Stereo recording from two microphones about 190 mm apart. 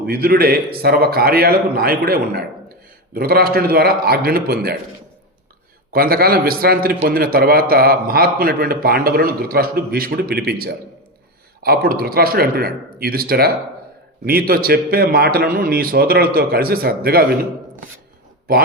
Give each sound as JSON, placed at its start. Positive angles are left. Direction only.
{"t": 0.0, "sound": "a man's voice", "side_deg": -55}
{"t": 5.9, "sound": "a man's voice", "side_deg": -55}